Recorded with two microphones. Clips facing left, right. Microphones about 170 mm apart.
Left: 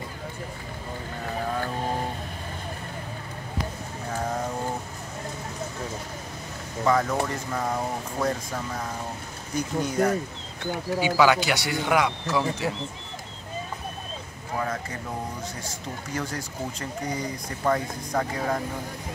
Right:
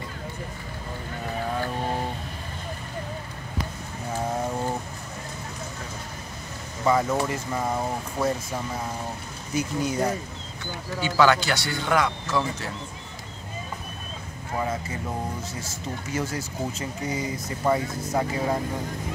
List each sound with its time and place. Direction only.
6.9 s speech: 5° right (ahead or behind)
11.0 s speech: 10° left (ahead or behind)
14.6 s speech: 5° right (ahead or behind)
16.2 s speech: 5° right (ahead or behind)